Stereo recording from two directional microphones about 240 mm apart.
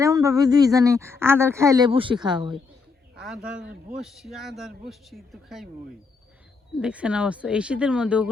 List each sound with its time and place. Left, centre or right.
0.0 s speech: centre
3.2 s speech: centre
6.7 s speech: centre